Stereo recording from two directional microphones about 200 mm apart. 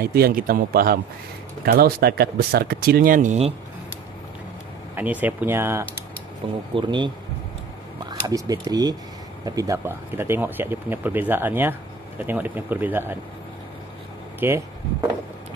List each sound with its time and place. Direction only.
0.0 s speech: 50° right (ahead or behind)
4.9 s speech: 10° right (ahead or behind)
6.7 s speech: 25° right (ahead or behind)
14.4 s speech: 10° right (ahead or behind)